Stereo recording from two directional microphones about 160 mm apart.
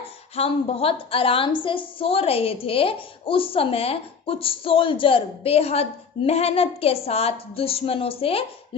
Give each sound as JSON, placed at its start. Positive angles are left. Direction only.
{"t": 0.3, "sound": "a woman's voice", "side_deg": 40}